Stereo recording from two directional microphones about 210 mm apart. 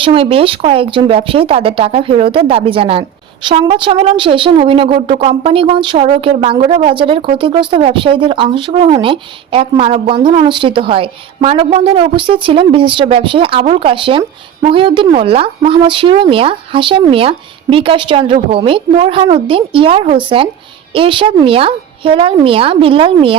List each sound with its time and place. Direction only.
0.0 s a woman's voice: 25° right (ahead or behind)